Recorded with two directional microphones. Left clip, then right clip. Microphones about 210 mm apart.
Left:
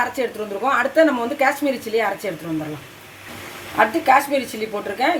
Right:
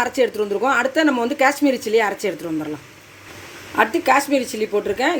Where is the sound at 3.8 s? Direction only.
40° right (ahead or behind).